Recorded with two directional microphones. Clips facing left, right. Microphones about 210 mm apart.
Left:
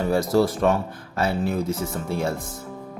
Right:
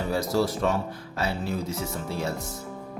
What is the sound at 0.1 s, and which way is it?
Speech, 55° left (ahead or behind).